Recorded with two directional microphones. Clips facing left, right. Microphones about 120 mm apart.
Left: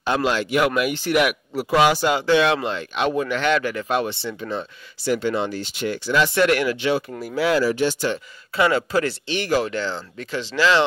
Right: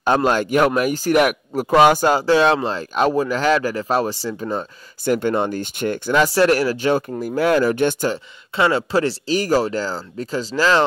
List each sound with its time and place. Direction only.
0.0 s speech: 45° right (ahead or behind)
8.1 s speech: 30° right (ahead or behind)